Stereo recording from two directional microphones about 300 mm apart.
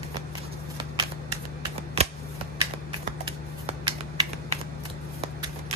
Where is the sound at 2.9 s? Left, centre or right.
Centre.